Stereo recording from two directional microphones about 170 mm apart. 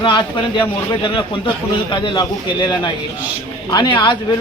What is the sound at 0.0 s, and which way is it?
Speech, 30° left (ahead or behind).